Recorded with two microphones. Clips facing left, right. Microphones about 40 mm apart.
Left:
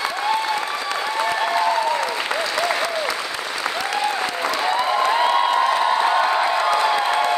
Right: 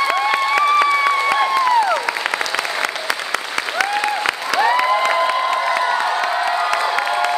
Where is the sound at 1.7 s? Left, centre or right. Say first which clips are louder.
Right 5 dB; right.